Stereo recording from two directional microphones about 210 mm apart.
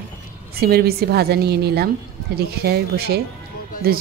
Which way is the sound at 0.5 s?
45° right (ahead or behind).